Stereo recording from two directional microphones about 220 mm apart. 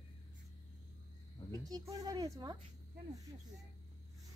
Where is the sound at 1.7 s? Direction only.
15° right (ahead or behind).